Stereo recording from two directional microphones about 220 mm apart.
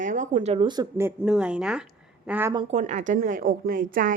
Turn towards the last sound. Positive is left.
turn(degrees=-40)  # may be behind; listen again after turning